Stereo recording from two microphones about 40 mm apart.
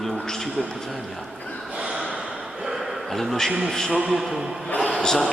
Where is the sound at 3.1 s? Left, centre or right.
Centre.